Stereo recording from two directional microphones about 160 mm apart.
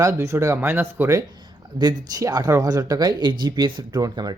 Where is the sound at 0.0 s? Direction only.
20° right (ahead or behind).